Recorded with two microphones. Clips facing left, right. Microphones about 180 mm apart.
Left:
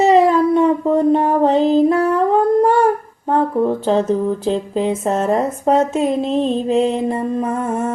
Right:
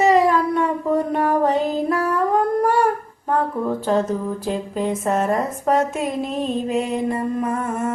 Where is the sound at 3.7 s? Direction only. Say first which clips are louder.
Left 4 dB; 25° left (ahead or behind).